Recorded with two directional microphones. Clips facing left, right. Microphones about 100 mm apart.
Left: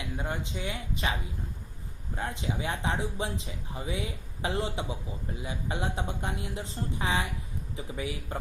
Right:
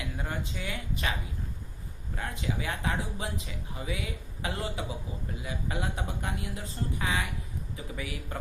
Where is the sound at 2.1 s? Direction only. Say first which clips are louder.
Left 1 dB; 25° left (ahead or behind).